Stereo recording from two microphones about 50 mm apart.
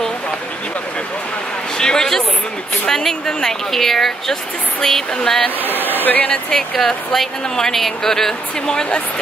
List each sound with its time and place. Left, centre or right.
1.8 s a woman's voice: centre
5.6 s speech: left
5.9 s hair dryer: left
6.5 s a woman's voice: centre